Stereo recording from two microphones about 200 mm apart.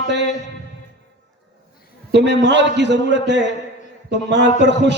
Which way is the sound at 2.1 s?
60° right (ahead or behind).